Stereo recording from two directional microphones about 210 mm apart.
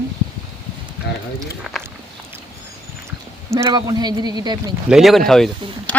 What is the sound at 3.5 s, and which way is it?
A man's voice, 15° right (ahead or behind).